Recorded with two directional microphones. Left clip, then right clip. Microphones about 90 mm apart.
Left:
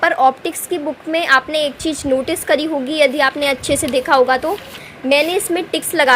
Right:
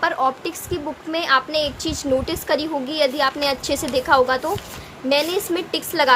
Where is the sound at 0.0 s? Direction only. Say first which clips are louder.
Left 7 dB; 55° left (ahead or behind).